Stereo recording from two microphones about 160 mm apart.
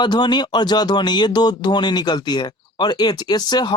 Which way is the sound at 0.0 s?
30° left (ahead or behind).